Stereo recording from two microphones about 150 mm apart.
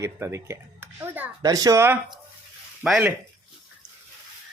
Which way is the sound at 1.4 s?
25° right (ahead or behind).